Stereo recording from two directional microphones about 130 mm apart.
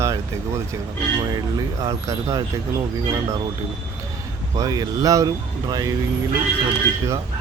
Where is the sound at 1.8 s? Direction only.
25° right (ahead or behind).